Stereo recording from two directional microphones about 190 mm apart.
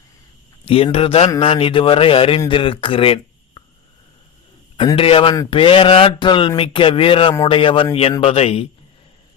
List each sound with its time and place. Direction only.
0.6 s speech: 30° left (ahead or behind)
4.8 s speech: 25° left (ahead or behind)